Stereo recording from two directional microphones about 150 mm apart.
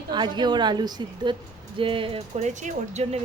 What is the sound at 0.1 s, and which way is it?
A woman's voice, 30° right (ahead or behind).